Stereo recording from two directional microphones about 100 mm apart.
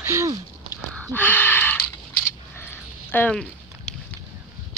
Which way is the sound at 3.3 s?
5° left (ahead or behind).